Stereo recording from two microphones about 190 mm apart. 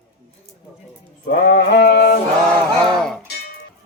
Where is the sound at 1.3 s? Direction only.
55° left (ahead or behind).